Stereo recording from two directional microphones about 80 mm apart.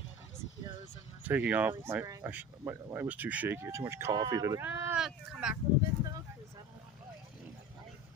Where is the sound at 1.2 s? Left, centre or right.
Right.